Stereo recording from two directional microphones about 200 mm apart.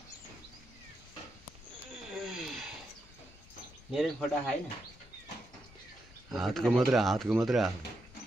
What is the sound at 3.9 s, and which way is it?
Speech, centre (ahead or behind).